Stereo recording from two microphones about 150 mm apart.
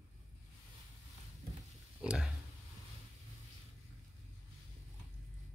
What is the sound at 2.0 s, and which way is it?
Speech, 5° right (ahead or behind).